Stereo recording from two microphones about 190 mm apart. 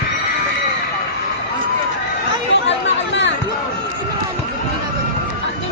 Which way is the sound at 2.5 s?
75° left (ahead or behind).